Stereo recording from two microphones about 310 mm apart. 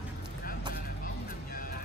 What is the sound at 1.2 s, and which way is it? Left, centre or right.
Vehicle, left.